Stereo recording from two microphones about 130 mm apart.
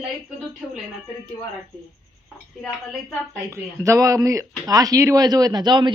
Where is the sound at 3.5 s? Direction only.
25° right (ahead or behind).